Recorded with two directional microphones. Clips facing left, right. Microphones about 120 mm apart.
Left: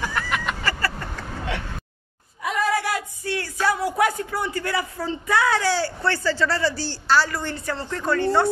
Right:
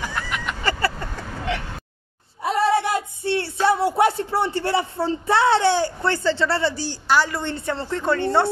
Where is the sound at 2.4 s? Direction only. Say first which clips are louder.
Right 4 dB; 30° right (ahead or behind).